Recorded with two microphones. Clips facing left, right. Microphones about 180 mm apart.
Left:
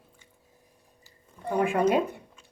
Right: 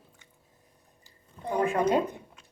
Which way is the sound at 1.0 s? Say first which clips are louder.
Left 1 dB; 15° right (ahead or behind).